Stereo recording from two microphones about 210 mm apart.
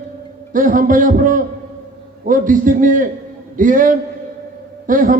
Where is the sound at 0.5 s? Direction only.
40° right (ahead or behind).